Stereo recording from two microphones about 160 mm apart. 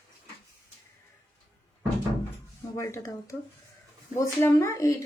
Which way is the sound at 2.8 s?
20° left (ahead or behind).